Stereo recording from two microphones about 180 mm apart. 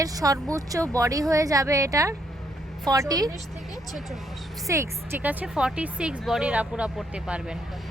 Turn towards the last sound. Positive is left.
turn(degrees=-5)  # may be behind; listen again after turning